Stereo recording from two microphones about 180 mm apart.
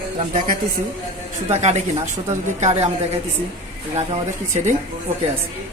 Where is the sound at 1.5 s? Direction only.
40° right (ahead or behind).